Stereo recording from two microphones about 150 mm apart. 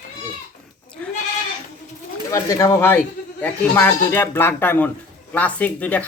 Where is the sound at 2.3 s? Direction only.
20° left (ahead or behind).